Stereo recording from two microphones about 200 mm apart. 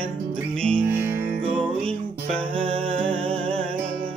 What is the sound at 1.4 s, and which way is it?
Music, 5° left (ahead or behind).